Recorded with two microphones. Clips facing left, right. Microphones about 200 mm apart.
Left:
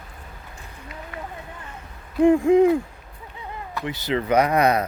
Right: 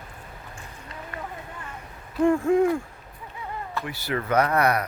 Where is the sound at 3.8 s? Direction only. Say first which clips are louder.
Left 6 dB; 20° left (ahead or behind).